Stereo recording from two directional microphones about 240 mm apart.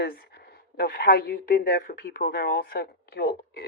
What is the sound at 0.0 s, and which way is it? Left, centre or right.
Speech, left.